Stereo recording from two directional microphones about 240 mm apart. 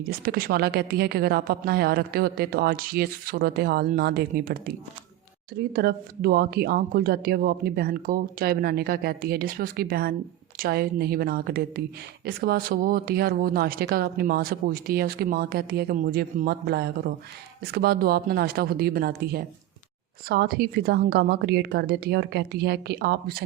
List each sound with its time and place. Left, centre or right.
0.0 s a woman's voice: right